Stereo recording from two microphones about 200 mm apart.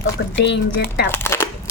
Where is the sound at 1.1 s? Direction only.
10° left (ahead or behind).